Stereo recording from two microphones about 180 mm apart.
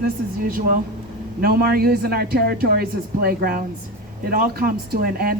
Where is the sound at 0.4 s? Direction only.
55° right (ahead or behind).